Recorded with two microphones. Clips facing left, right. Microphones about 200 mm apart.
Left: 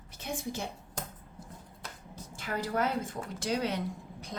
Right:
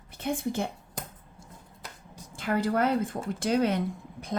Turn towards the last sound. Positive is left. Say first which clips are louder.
# right 5 dB
turn(degrees=-55)  # may be behind; listen again after turning